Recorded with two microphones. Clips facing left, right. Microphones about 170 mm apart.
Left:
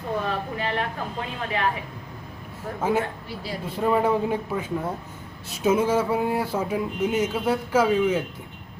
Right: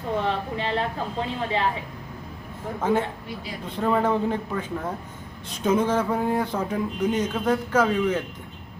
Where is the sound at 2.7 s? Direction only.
10° left (ahead or behind).